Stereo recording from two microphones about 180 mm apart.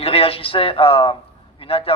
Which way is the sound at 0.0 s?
30° left (ahead or behind).